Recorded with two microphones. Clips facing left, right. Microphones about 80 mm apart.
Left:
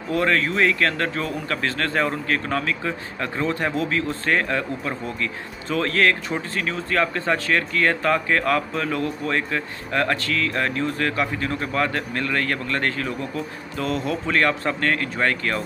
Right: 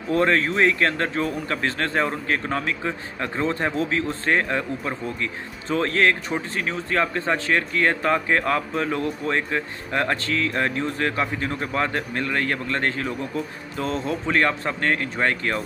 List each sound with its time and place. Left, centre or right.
0.1 s speech: right